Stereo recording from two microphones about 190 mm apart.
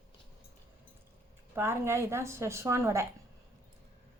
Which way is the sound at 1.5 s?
15° right (ahead or behind).